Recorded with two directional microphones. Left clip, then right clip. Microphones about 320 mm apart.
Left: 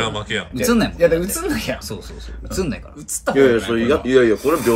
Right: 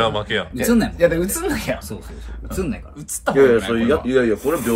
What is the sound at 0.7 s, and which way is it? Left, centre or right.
Speech, centre.